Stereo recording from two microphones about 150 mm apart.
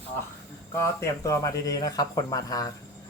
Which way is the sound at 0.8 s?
20° left (ahead or behind).